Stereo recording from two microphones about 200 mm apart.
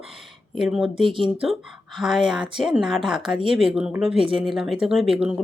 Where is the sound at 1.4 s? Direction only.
Centre (ahead or behind).